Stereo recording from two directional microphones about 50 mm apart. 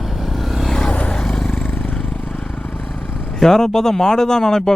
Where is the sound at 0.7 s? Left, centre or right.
Left.